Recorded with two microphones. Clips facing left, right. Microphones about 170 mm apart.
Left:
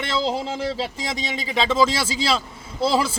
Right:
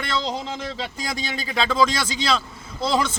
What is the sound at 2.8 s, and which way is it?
Speech, 5° left (ahead or behind).